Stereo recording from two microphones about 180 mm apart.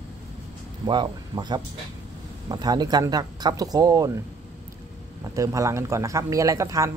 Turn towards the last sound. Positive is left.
turn(degrees=-20)  # may be behind; listen again after turning